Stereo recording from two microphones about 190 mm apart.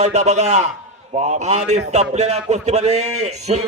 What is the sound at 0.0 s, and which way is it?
A man's voice, 35° right (ahead or behind).